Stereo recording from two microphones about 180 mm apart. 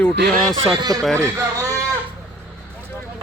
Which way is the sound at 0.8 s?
20° right (ahead or behind).